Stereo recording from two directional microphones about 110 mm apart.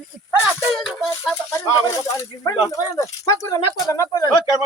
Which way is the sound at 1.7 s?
30° left (ahead or behind).